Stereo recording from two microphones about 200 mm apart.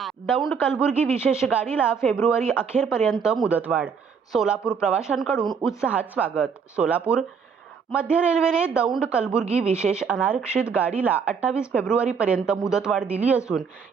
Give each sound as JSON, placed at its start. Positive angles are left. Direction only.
{"t": 0.4, "sound": "speech", "side_deg": 0}
{"t": 1.1, "sound": "speech", "side_deg": 10}
{"t": 1.8, "sound": "speech", "side_deg": -5}
{"t": 9.4, "sound": "speech", "side_deg": -30}
{"t": 9.7, "sound": "speech", "side_deg": -5}